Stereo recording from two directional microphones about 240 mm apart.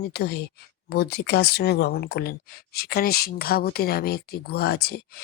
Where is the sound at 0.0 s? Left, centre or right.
Left.